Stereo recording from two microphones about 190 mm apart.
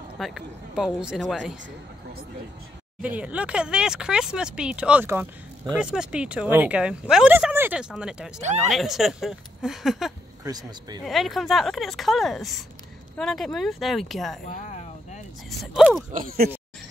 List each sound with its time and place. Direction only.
0.2 s speech: centre (ahead or behind)
3.2 s speech: 5° right (ahead or behind)
10.4 s speech: 20° right (ahead or behind)
11.1 s speech: centre (ahead or behind)
14.4 s speech: 40° left (ahead or behind)
15.6 s speech: centre (ahead or behind)
16.1 s speech: 45° right (ahead or behind)